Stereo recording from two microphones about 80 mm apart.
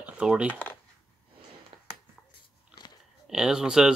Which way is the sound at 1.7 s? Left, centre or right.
Right.